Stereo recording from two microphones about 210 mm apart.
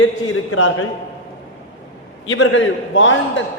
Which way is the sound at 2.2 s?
70° left (ahead or behind).